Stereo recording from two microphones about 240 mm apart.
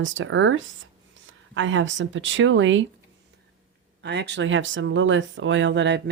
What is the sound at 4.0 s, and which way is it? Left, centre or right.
Speech, right.